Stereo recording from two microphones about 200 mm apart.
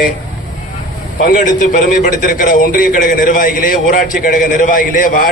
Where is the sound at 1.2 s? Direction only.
40° left (ahead or behind).